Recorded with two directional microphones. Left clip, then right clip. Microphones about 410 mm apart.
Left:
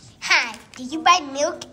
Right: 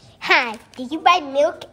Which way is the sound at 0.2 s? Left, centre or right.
Centre.